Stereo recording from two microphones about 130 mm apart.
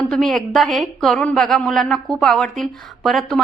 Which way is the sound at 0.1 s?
Centre (ahead or behind).